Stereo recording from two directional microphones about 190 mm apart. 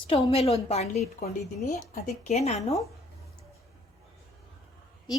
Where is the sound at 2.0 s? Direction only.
35° left (ahead or behind).